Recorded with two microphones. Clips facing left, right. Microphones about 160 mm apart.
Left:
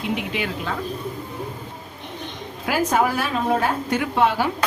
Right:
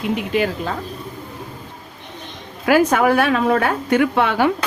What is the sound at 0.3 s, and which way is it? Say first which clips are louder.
Speech: right 7 dB; 40° right (ahead or behind).